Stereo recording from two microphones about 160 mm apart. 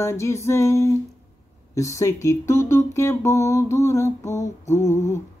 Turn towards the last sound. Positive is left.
turn(degrees=15)  # may be behind; listen again after turning